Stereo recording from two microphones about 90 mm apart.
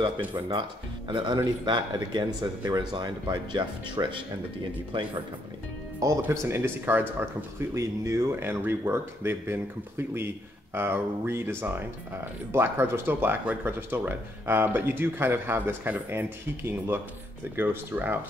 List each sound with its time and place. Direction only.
0.3 s speech: 60° right (ahead or behind)
6.2 s speech: 30° right (ahead or behind)
7.7 s speech: 35° right (ahead or behind)